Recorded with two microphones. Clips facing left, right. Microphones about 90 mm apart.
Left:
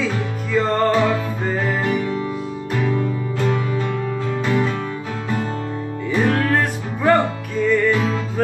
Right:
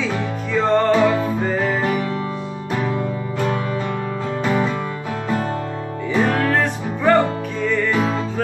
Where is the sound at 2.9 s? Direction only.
15° right (ahead or behind).